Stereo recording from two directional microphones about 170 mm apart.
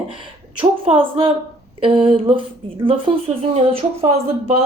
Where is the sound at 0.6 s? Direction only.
35° right (ahead or behind).